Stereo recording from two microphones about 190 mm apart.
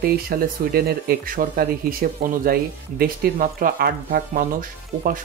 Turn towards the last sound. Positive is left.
turn(degrees=-45)  # may be behind; listen again after turning